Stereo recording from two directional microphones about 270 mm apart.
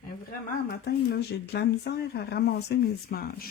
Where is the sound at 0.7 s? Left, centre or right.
Left.